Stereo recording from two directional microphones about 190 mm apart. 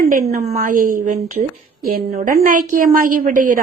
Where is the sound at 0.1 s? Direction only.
35° right (ahead or behind).